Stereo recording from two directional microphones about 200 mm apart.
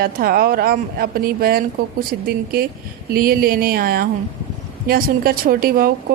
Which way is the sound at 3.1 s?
45° right (ahead or behind).